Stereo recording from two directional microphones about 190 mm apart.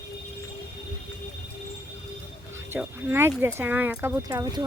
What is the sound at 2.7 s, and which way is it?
Speech, 10° right (ahead or behind).